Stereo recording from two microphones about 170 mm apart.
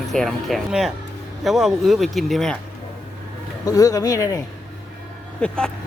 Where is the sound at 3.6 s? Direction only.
20° left (ahead or behind).